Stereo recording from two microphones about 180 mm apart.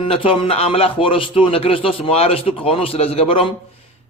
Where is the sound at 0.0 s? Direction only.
30° left (ahead or behind).